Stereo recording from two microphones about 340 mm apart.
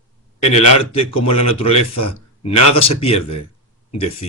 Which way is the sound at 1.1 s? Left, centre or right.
Left.